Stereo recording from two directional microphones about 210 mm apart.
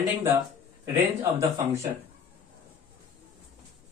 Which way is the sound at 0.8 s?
15° right (ahead or behind).